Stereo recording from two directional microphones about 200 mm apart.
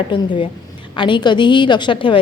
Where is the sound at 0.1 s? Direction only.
25° left (ahead or behind).